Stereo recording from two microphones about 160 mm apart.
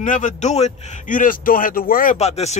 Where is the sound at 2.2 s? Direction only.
40° left (ahead or behind).